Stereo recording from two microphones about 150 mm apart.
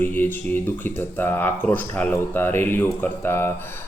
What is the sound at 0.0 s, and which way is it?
Speech, 15° left (ahead or behind).